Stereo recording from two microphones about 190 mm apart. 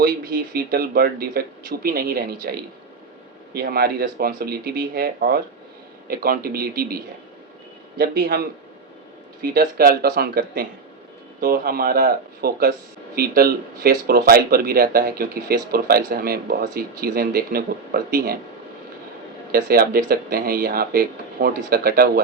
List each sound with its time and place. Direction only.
0.0 s a man's voice: 50° right (ahead or behind)
19.5 s speech: 50° right (ahead or behind)